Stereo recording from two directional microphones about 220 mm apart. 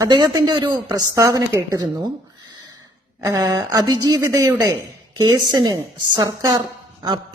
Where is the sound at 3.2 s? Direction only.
15° right (ahead or behind).